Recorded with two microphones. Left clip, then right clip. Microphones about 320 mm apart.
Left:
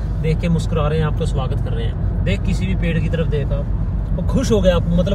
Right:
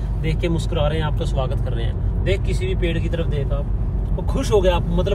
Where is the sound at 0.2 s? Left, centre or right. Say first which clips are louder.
Left 2 dB; right.